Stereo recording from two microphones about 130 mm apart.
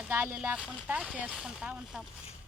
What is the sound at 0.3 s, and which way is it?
Speech, 10° right (ahead or behind).